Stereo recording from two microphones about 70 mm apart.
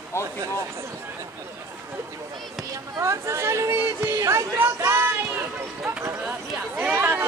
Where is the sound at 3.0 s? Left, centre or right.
Right.